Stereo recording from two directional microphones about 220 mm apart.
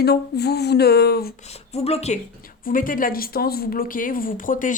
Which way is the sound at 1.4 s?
30° left (ahead or behind).